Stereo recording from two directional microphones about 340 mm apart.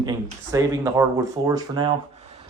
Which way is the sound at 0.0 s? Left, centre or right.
Centre.